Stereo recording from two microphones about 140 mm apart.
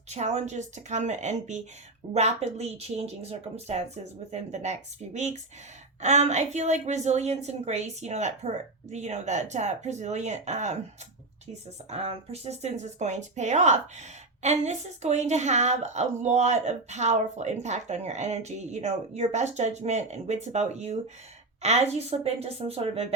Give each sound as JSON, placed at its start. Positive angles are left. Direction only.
{"t": 0.1, "sound": "a woman's voice", "side_deg": -55}
{"t": 11.9, "sound": "a woman's voice", "side_deg": -45}